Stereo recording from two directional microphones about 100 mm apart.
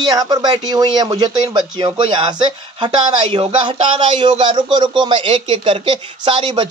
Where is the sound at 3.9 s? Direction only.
50° right (ahead or behind).